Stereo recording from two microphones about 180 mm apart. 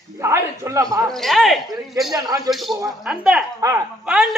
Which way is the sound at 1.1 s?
Centre (ahead or behind).